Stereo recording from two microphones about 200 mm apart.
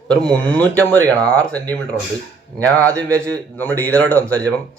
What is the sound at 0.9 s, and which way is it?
Speech, 15° right (ahead or behind).